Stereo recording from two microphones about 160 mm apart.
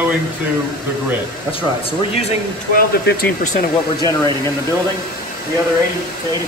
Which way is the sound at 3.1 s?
90° left.